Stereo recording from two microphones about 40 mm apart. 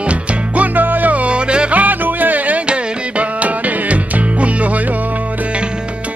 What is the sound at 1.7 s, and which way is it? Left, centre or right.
Music, right.